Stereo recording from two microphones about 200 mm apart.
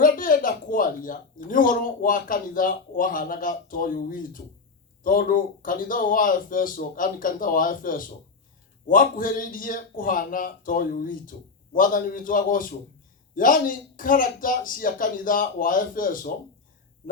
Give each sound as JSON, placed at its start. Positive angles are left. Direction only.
{"t": 0.0, "sound": "speech", "side_deg": 45}